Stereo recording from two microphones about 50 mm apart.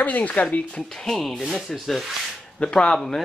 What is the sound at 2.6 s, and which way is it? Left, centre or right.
Speech, centre.